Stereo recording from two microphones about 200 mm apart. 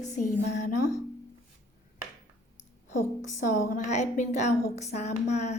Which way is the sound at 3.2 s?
40° left (ahead or behind).